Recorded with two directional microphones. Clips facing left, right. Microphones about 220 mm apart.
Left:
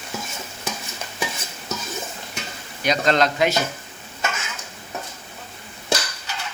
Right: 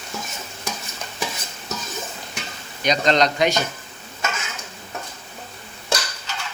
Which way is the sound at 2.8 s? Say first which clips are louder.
Right 1 dB; 5° left (ahead or behind).